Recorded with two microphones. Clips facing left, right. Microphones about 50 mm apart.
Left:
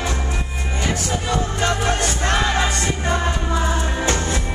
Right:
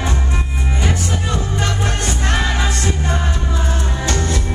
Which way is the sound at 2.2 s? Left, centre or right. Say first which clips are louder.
Left 1 dB; left.